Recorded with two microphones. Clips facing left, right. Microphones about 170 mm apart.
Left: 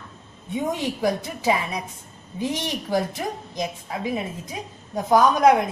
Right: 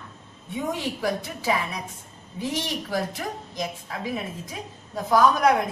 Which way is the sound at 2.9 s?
20° left (ahead or behind).